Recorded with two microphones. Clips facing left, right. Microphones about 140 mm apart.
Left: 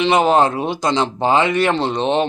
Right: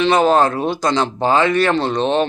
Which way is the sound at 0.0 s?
20° left (ahead or behind).